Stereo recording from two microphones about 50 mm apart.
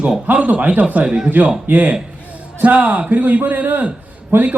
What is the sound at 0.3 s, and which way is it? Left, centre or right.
Speech, right.